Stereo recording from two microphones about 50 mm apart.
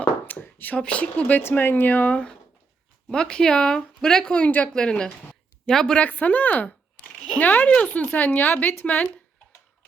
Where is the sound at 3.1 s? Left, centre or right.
Centre.